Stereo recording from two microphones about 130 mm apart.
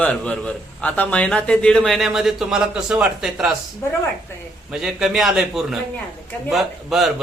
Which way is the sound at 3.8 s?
20° left (ahead or behind).